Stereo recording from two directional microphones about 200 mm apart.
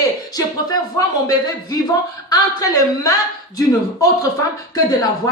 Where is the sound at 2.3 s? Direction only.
15° left (ahead or behind).